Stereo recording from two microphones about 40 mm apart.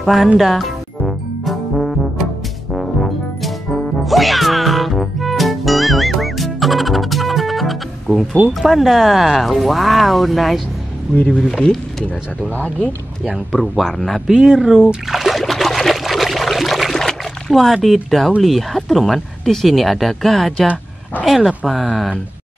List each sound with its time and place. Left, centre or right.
0.0 s speech: centre
0.4 s music: centre
8.5 s speech: centre
11.2 s speech: left
13.5 s speech: centre
14.2 s speech: centre
15.0 s trickle: centre
18.4 s speech: centre